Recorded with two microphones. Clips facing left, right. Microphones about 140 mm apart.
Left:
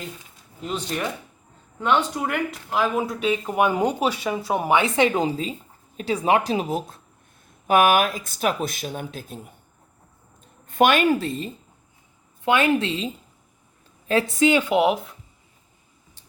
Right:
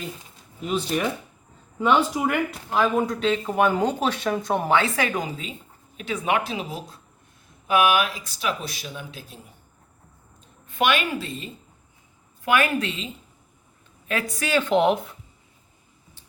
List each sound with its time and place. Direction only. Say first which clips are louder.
0.6 s speech: right 3 dB; 5° right (ahead or behind); by 9.4 s 50° left (ahead or behind)
10.7 s speech: left 5 dB; 45° left (ahead or behind)
12.5 s a woman's voice: left 2 dB; 25° left (ahead or behind)
14.1 s speech: left 6 dB; 30° left (ahead or behind); by 15.1 s 5° left (ahead or behind)